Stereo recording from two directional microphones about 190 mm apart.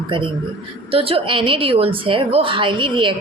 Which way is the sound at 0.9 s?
30° right (ahead or behind).